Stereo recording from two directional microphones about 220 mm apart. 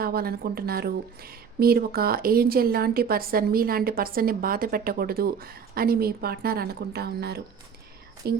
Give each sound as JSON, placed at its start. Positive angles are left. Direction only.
{"t": 0.0, "sound": "speech", "side_deg": -45}